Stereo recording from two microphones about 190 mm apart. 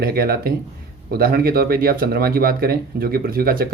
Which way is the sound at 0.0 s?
50° right (ahead or behind).